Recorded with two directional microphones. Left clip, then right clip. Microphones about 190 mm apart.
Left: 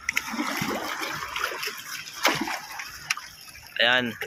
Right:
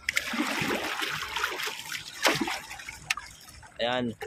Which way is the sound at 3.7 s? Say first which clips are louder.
Left 8 dB; 5° right (ahead or behind).